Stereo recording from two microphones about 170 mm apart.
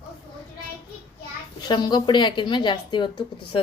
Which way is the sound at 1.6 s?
25° left (ahead or behind).